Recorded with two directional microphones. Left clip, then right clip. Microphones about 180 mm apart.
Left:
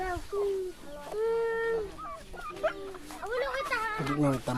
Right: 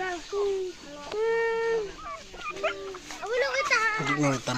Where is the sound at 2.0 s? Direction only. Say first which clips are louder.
Right 4 dB; 25° right (ahead or behind).